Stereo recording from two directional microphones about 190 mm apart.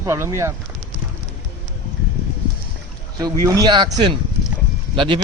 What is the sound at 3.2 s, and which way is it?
Speech, 20° right (ahead or behind).